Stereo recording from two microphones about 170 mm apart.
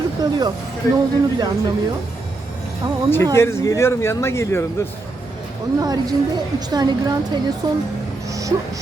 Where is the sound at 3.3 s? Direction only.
15° left (ahead or behind).